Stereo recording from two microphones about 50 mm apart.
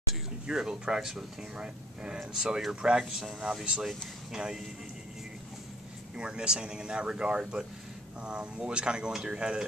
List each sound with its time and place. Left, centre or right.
0.5 s speech: centre
6.1 s speech: centre